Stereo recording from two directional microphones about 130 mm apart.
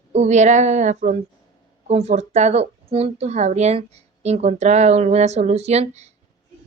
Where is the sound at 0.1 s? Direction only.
60° right (ahead or behind).